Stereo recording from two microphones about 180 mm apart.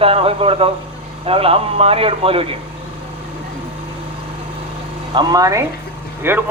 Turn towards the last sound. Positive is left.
turn(degrees=-10)  # may be behind; listen again after turning